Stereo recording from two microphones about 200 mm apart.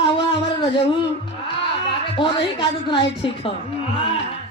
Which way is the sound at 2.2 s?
25° left (ahead or behind).